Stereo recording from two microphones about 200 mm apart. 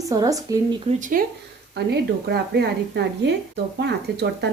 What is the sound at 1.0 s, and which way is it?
Speech, 45° right (ahead or behind).